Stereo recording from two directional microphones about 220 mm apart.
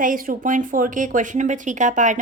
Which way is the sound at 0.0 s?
40° right (ahead or behind).